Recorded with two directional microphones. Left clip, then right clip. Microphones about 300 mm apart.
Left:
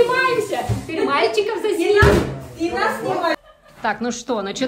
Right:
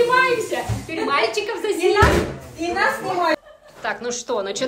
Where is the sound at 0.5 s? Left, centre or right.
Centre.